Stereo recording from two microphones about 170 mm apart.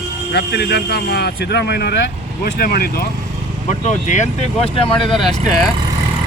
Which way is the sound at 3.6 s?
45° left (ahead or behind).